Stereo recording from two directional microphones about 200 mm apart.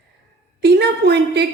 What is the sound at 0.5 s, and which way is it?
Speech, 55° right (ahead or behind).